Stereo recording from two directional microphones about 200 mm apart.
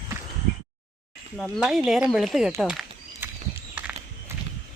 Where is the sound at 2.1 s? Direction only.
Centre (ahead or behind).